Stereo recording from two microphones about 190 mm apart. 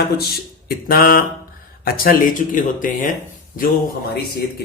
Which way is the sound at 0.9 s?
50° left (ahead or behind).